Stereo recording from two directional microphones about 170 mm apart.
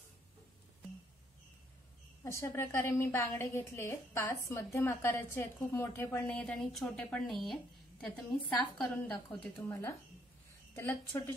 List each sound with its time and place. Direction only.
2.2 s a woman's voice: 15° left (ahead or behind)
8.5 s a woman's voice: 5° left (ahead or behind)